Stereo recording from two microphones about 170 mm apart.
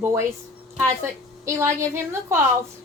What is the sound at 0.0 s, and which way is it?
Speech, 15° right (ahead or behind).